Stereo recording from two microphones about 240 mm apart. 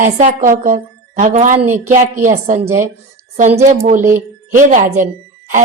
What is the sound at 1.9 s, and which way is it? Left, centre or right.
A woman's voice, right.